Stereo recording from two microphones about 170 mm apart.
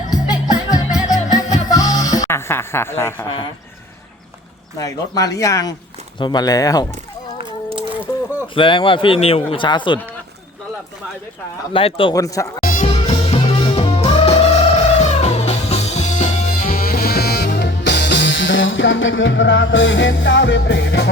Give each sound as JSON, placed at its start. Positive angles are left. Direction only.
{"t": 0.1, "sound": "music", "side_deg": 20}
{"t": 4.8, "sound": "speech", "side_deg": 20}
{"t": 8.5, "sound": "speech", "side_deg": 30}
{"t": 11.7, "sound": "speech", "side_deg": 30}
{"t": 12.1, "sound": "speech", "side_deg": 20}
{"t": 12.8, "sound": "music", "side_deg": 35}